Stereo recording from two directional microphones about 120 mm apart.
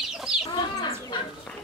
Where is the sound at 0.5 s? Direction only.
40° left (ahead or behind).